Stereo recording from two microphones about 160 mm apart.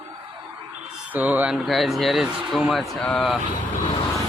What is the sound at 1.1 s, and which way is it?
Speech, 10° right (ahead or behind).